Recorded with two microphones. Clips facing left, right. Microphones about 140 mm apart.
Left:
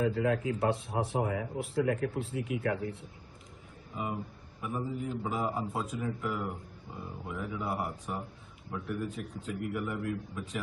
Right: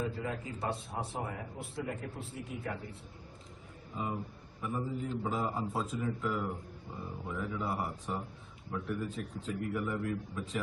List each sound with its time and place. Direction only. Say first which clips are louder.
0.0 s speech: left 8 dB; 90° left
3.9 s a man's voice: left 1 dB; 5° left (ahead or behind)